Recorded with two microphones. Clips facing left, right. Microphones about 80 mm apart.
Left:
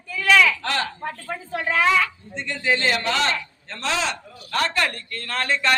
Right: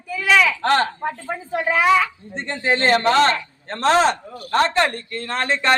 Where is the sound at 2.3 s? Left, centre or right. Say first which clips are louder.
Right 3 dB; right.